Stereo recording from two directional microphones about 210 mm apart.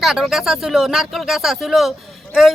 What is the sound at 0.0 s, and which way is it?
Speech, centre (ahead or behind).